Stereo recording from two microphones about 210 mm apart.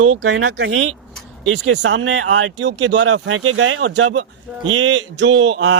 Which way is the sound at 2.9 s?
75° right (ahead or behind).